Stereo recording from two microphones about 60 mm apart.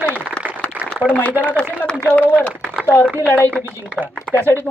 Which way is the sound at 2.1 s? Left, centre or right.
Left.